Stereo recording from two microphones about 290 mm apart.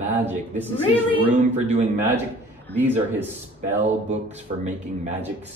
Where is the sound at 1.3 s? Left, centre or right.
Right.